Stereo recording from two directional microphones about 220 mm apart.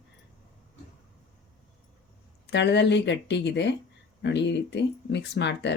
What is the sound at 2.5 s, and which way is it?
A woman's voice, 50° left (ahead or behind).